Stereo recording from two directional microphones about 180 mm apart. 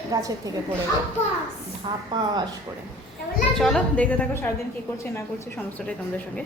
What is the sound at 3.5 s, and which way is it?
Speech, 5° left (ahead or behind).